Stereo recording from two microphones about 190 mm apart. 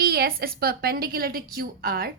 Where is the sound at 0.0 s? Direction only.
50° right (ahead or behind).